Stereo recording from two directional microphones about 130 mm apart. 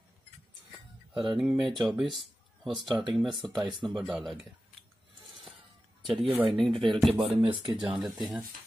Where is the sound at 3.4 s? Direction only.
35° right (ahead or behind).